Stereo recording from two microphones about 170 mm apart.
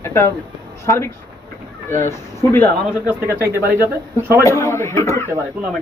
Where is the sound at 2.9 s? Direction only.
10° right (ahead or behind).